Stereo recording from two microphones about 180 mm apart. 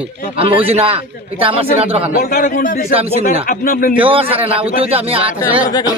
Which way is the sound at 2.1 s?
50° left (ahead or behind).